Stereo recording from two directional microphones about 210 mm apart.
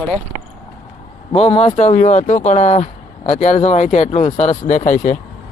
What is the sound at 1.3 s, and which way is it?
Speech, 25° left (ahead or behind).